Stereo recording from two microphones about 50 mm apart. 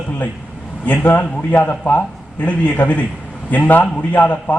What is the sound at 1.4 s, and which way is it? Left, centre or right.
A man's voice, left.